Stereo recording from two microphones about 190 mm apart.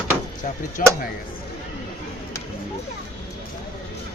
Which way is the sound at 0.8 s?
45° left (ahead or behind).